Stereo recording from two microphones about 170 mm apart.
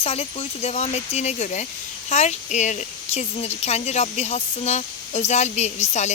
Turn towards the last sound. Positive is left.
turn(degrees=40)  # may be behind; listen again after turning